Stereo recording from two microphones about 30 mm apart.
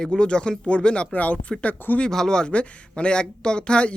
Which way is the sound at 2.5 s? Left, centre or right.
Left.